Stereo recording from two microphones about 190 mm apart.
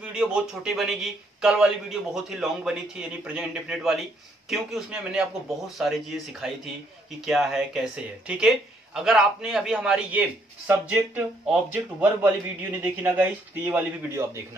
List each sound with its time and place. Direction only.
0.0 s a man's voice: 5° right (ahead or behind)